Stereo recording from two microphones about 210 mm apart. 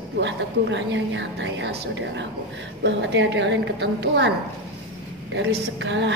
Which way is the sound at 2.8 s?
60° right (ahead or behind).